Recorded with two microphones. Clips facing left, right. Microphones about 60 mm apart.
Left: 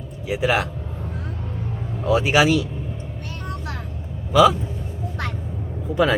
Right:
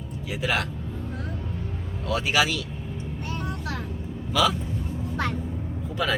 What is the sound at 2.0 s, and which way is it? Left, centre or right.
Speech, centre.